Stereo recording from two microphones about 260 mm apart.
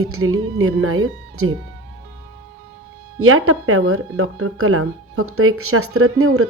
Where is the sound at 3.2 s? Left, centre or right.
Right.